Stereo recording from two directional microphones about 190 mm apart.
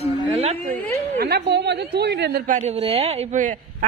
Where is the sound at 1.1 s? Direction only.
55° right (ahead or behind); by 3.5 s 40° right (ahead or behind).